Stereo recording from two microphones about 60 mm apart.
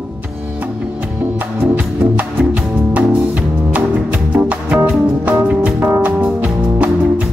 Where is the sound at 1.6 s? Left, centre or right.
Right.